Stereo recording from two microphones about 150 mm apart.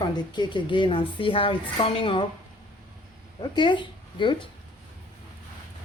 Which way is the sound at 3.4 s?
30° left (ahead or behind).